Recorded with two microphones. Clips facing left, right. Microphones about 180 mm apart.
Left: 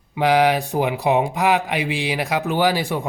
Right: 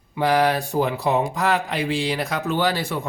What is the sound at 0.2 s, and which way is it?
Speech, 15° left (ahead or behind).